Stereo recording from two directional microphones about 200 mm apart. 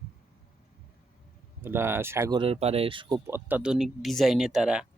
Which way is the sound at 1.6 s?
10° right (ahead or behind).